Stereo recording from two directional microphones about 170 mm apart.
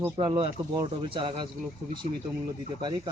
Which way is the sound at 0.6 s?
20° right (ahead or behind).